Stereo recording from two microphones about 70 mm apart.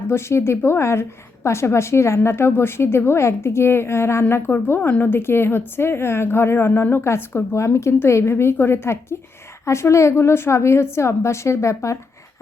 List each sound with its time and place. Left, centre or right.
0.1 s a woman's voice: left